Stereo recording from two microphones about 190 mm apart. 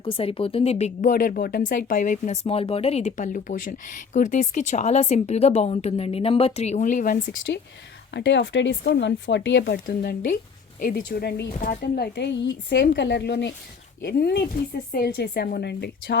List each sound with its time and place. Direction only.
0.0 s a woman's voice: 30° left (ahead or behind)
8.1 s speech: 70° left (ahead or behind)